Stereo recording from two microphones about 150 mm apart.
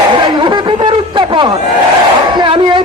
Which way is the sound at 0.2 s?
30° right (ahead or behind).